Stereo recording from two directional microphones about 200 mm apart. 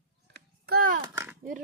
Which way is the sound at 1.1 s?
10° right (ahead or behind).